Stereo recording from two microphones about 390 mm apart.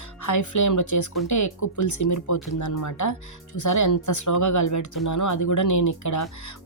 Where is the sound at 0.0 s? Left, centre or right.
Left.